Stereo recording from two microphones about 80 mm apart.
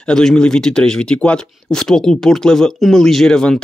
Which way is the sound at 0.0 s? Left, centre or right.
Centre.